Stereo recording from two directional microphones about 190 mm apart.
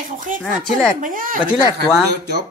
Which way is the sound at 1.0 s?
45° right (ahead or behind).